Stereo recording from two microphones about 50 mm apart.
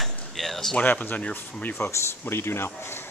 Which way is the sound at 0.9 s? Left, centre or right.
Left.